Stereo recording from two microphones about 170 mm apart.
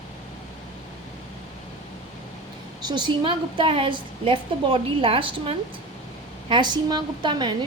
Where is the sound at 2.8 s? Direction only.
25° right (ahead or behind).